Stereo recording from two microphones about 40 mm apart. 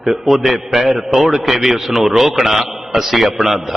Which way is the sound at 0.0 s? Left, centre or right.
Centre.